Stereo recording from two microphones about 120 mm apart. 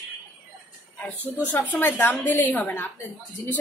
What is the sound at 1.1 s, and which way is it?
Speech, 15° right (ahead or behind).